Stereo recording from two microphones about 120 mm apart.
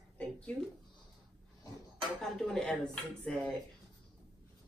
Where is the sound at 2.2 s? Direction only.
5° left (ahead or behind).